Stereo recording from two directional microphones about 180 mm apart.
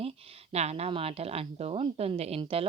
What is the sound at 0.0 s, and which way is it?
A woman's voice, 35° right (ahead or behind).